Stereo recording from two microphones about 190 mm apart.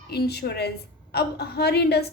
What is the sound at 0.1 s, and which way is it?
A woman's voice, 60° left (ahead or behind).